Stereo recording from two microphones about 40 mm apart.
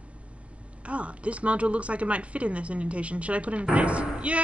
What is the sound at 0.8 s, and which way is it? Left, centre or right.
Speech, right.